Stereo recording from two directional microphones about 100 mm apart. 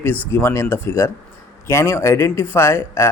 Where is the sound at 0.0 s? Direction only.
20° left (ahead or behind).